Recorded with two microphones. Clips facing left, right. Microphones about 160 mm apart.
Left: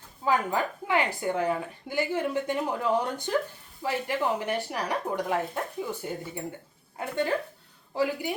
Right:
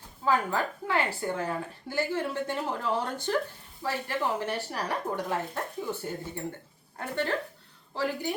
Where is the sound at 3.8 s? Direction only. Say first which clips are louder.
Left 2 dB; 15° left (ahead or behind).